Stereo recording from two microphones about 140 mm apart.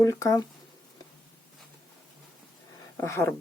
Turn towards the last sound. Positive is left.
turn(degrees=20)  # may be behind; listen again after turning